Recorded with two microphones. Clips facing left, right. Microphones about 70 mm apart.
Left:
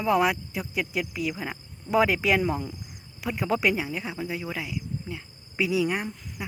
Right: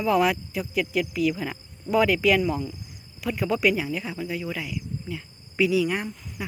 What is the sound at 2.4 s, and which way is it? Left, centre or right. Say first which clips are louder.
Speech: right 1 dB; left.